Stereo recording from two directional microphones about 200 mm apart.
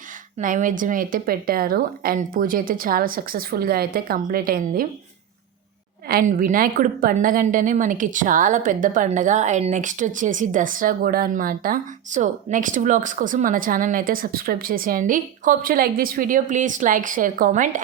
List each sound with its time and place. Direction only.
0.3 s a woman's voice: 40° right (ahead or behind)
6.1 s a woman's voice: 45° right (ahead or behind)